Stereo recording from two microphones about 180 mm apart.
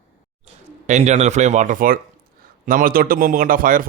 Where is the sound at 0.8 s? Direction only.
40° right (ahead or behind).